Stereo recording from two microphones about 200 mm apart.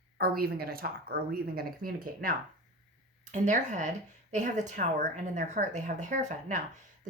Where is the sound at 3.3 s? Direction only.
40° right (ahead or behind).